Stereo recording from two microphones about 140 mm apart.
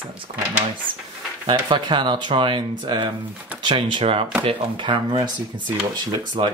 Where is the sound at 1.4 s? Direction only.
35° right (ahead or behind).